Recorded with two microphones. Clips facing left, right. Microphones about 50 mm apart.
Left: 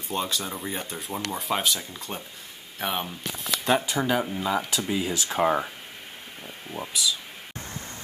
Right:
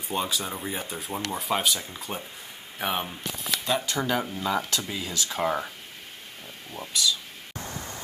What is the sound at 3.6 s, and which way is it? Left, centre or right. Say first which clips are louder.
Speech: left 5 dB; left.